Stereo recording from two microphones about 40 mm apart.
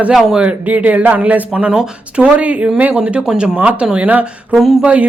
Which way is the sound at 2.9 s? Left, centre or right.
Right.